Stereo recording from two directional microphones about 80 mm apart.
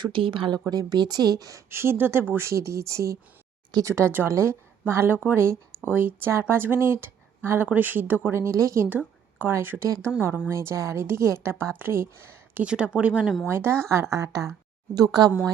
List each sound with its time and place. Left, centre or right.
0.0 s speech: right
0.6 s speech: right
1.7 s speech: right
8.4 s speech: right
8.9 s speech: right
12.6 s speech: centre
13.5 s speech: right
14.9 s speech: right